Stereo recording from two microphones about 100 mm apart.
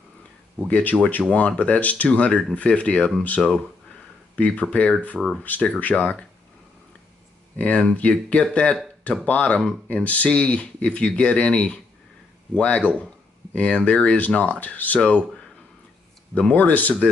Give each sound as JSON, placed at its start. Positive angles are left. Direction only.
{"t": 0.7, "sound": "speech", "side_deg": 15}
{"t": 7.5, "sound": "speech", "side_deg": 15}